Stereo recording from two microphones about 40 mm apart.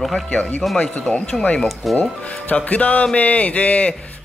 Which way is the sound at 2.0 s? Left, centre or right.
Left.